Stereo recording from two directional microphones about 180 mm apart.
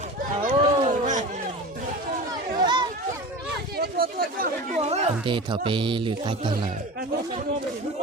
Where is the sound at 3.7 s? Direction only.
55° right (ahead or behind).